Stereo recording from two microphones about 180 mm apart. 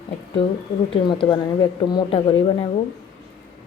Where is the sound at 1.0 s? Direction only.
25° left (ahead or behind).